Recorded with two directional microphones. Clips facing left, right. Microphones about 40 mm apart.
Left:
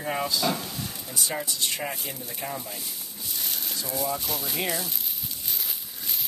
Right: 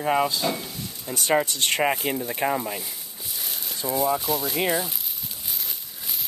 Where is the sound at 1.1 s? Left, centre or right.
Right.